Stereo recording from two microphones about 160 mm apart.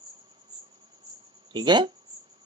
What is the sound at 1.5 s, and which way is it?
Speech, 30° right (ahead or behind).